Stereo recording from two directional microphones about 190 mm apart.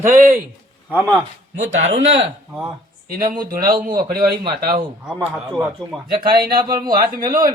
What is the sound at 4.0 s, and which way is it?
Speech, 50° right (ahead or behind).